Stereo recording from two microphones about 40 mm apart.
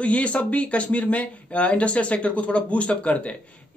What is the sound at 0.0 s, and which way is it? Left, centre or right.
Speech, left.